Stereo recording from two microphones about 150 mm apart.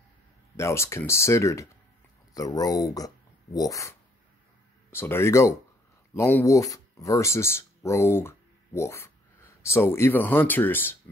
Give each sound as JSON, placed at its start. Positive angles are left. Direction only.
{"t": 0.6, "sound": "speech", "side_deg": 20}
{"t": 4.9, "sound": "speech", "side_deg": 15}